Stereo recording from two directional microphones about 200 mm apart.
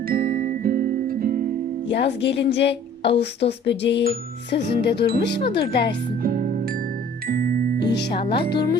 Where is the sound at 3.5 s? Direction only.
60° left (ahead or behind).